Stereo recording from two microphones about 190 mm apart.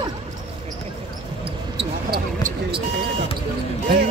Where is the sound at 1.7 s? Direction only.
50° right (ahead or behind).